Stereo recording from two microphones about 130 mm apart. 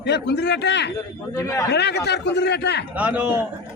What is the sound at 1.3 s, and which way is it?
Speech, 25° left (ahead or behind).